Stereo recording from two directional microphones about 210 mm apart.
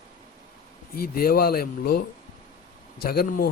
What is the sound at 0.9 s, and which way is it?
Speech, 45° left (ahead or behind).